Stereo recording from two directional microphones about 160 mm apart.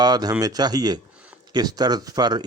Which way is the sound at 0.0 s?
25° right (ahead or behind).